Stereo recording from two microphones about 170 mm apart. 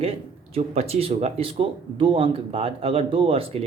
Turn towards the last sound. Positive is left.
turn(degrees=-35)  # may be behind; listen again after turning